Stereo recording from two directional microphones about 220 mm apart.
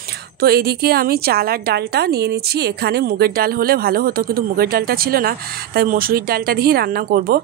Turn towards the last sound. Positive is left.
turn(degrees=-45)  # may be behind; listen again after turning